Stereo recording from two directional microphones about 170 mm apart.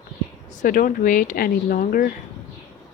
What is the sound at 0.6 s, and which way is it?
Speech, 55° left (ahead or behind).